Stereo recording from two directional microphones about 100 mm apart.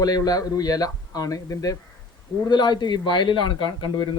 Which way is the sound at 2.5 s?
50° left (ahead or behind).